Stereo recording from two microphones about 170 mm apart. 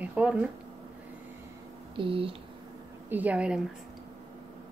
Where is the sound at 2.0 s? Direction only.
30° right (ahead or behind).